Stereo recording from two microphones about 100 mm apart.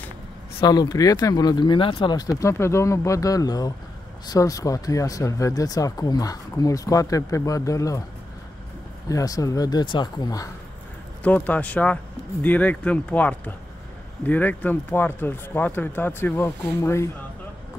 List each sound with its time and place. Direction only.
0.6 s speech: 40° left (ahead or behind); by 2.1 s 60° left (ahead or behind)
2.1 s speech: 35° left (ahead or behind)
9.1 s speech: 35° left (ahead or behind)
11.2 s speech: 15° left (ahead or behind)